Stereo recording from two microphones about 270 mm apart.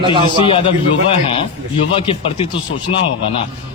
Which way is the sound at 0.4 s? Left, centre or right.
Centre.